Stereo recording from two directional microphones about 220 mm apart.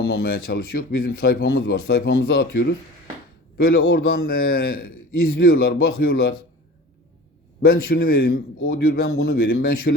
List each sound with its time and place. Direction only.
0.0 s speech: 45° left (ahead or behind)
3.9 s speech: 45° left (ahead or behind)
7.6 s speech: 45° left (ahead or behind)